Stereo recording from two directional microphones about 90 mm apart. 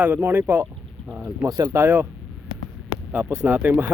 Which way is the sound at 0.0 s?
20° right (ahead or behind).